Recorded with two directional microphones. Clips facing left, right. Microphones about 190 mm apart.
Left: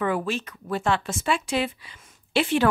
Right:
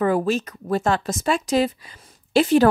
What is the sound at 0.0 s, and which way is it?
Speech, 40° right (ahead or behind).